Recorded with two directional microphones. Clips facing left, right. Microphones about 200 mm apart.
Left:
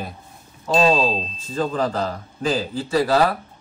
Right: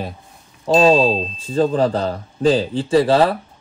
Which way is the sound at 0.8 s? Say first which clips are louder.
Right 4 dB; 30° right (ahead or behind).